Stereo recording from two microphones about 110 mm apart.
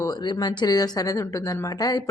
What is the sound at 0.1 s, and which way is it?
Speech, 40° left (ahead or behind).